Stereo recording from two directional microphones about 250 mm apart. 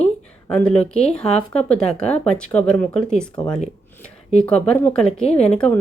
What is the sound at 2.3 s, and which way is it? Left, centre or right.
Speech, centre.